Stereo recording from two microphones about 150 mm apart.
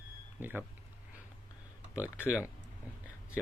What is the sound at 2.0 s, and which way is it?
Speech, 15° left (ahead or behind).